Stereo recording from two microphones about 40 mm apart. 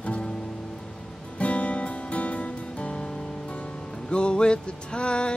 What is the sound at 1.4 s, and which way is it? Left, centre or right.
Music, left.